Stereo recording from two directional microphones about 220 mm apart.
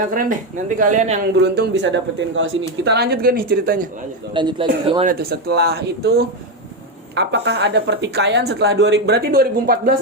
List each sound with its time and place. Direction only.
0.1 s speech: 40° right (ahead or behind)
1.4 s speech: 50° right (ahead or behind)
4.4 s a man's voice: 20° right (ahead or behind)
5.0 s speech: 45° right (ahead or behind)